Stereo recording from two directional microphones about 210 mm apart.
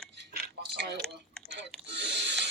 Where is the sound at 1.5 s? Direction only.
55° right (ahead or behind).